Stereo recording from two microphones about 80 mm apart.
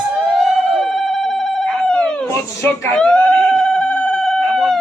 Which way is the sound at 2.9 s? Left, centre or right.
Centre.